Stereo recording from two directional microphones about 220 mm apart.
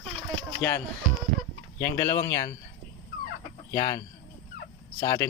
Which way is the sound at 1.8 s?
15° left (ahead or behind).